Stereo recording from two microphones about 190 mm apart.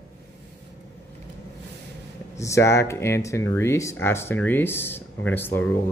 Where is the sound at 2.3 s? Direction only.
15° left (ahead or behind).